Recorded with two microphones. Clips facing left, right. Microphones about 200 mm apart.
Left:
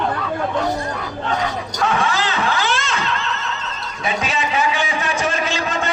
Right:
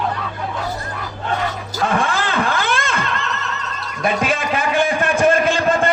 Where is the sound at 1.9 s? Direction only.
55° right (ahead or behind).